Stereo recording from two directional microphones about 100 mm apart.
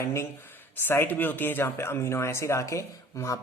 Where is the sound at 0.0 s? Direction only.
25° left (ahead or behind).